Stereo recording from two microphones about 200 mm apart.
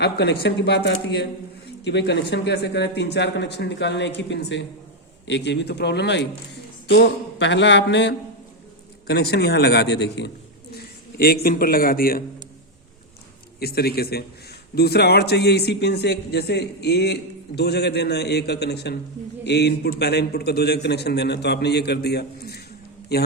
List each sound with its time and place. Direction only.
0.0 s a man's voice: 55° left (ahead or behind)
13.6 s a man's voice: 50° left (ahead or behind)